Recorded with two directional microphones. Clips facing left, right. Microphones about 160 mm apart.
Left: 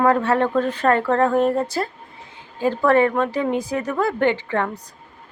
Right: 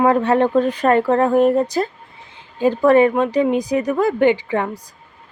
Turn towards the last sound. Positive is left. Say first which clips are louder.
# right 4 dB
turn(degrees=-15)  # may be behind; listen again after turning